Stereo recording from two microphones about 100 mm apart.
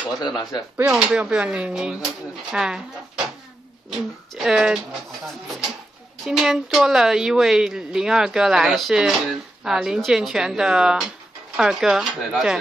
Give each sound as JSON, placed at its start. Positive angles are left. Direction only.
{"t": 0.4, "sound": "speech", "side_deg": 45}
{"t": 0.8, "sound": "a woman's voice", "side_deg": -10}
{"t": 3.9, "sound": "a woman's voice", "side_deg": -5}